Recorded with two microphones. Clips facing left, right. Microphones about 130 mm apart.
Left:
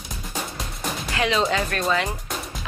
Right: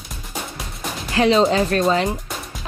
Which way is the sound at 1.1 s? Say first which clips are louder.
Right 7 dB; 35° right (ahead or behind).